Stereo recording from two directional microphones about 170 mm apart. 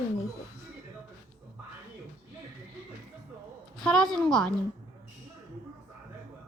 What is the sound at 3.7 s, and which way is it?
Speech, centre (ahead or behind).